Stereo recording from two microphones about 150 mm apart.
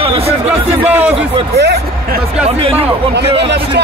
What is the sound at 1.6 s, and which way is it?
Speech, 90° right.